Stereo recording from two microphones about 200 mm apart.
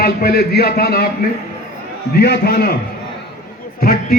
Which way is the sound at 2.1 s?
55° left (ahead or behind).